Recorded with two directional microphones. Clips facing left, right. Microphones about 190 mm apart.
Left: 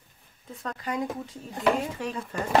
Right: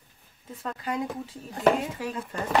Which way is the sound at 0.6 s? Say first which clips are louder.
Even; 5° right (ahead or behind).